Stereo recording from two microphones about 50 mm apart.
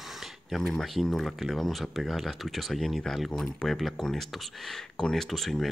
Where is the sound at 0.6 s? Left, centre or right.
Centre.